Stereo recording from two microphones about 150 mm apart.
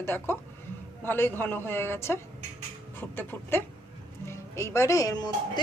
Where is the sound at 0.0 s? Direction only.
15° left (ahead or behind).